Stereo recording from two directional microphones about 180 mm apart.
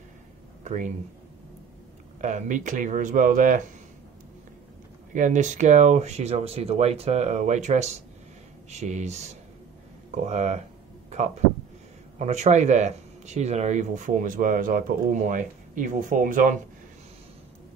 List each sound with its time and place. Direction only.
0.7 s speech: 45° right (ahead or behind)
2.2 s speech: 45° right (ahead or behind)
5.1 s speech: 45° right (ahead or behind)
11.1 s a sound: 40° right (ahead or behind)
12.2 s speech: 40° right (ahead or behind)